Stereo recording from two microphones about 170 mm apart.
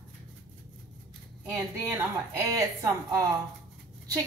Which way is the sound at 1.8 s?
15° right (ahead or behind).